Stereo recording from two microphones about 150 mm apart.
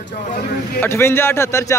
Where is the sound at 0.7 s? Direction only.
15° left (ahead or behind).